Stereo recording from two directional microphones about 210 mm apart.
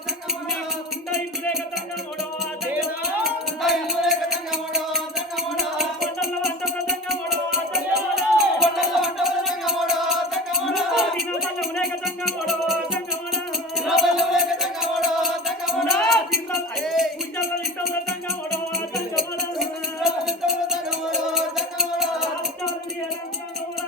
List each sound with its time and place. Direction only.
3.2 s music: centre (ahead or behind)
18.9 s music: centre (ahead or behind)